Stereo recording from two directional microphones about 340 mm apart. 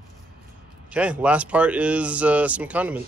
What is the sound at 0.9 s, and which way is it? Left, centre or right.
Speech, centre.